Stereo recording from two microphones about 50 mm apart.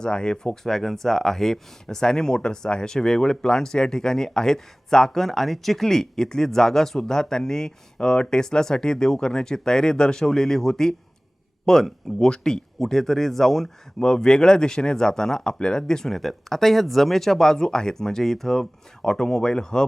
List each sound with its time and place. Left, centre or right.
0.0 s speech: centre
0.6 s speech: centre